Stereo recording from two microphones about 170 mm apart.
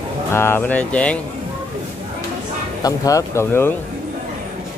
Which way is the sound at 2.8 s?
20° left (ahead or behind).